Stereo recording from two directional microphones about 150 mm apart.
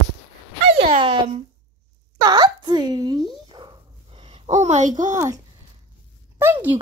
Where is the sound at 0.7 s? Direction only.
40° right (ahead or behind).